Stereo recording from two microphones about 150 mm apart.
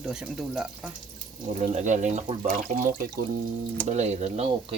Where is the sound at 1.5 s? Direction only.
50° right (ahead or behind).